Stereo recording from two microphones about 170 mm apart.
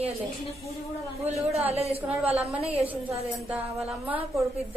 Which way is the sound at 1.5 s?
35° right (ahead or behind).